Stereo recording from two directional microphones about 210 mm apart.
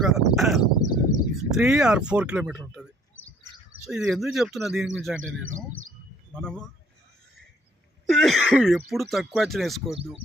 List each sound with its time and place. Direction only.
0.0 s speech: centre (ahead or behind)
0.6 s a sound: 20° left (ahead or behind)
1.4 s speech: centre (ahead or behind)
5.2 s speech: 75° right (ahead or behind)
6.3 s speech: 5° left (ahead or behind)
8.0 s speech: centre (ahead or behind)